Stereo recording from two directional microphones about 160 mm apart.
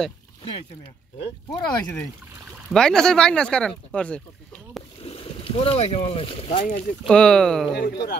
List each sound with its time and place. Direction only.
1.2 s speech: 25° left (ahead or behind)
2.7 s speech: 5° left (ahead or behind)
5.0 s speech: 35° left (ahead or behind)
7.1 s speech: 5° left (ahead or behind)
7.7 s speech: 90° left